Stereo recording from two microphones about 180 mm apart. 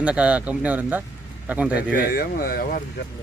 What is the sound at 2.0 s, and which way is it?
Speech, 55° left (ahead or behind).